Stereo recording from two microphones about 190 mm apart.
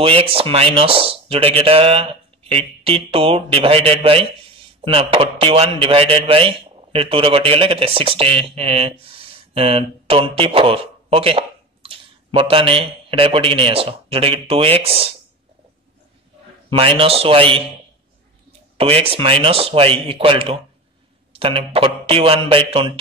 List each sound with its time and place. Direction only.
0.0 s speech: 30° right (ahead or behind)
16.7 s speech: 30° right (ahead or behind)
18.8 s speech: 30° right (ahead or behind)